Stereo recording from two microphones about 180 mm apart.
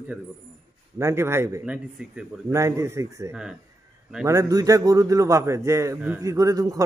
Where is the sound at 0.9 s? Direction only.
15° right (ahead or behind).